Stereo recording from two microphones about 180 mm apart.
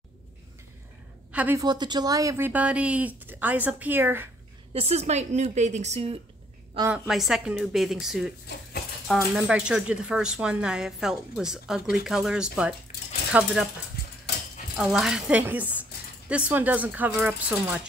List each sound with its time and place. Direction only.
1.3 s a woman's voice: 10° right (ahead or behind)
1.6 s a woman's voice: 25° right (ahead or behind)
4.7 s a woman's voice: 35° right (ahead or behind)
6.9 s a woman's voice: centre (ahead or behind)
14.8 s a woman's voice: centre (ahead or behind)